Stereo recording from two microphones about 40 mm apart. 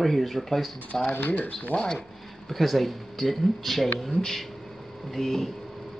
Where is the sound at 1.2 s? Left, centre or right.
Left.